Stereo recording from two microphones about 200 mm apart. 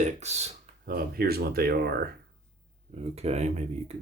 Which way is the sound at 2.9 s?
30° right (ahead or behind).